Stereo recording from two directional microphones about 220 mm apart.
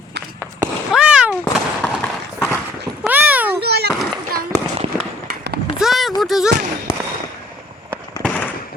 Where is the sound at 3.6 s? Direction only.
45° right (ahead or behind).